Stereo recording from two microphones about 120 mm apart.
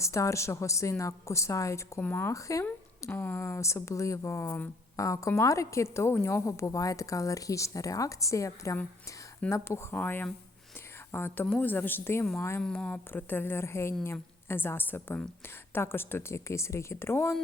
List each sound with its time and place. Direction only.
0.0 s speech: 25° left (ahead or behind)
2.0 s a woman's voice: 15° left (ahead or behind)
12.6 s a woman's voice: 10° left (ahead or behind)